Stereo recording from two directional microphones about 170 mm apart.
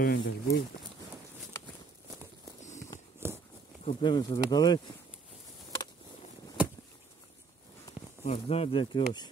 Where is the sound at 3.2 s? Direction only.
15° right (ahead or behind).